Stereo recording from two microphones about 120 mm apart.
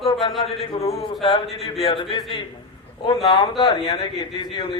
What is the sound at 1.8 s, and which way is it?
A man's voice, 45° left (ahead or behind).